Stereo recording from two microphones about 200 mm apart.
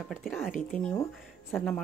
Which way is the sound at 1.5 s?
5° left (ahead or behind).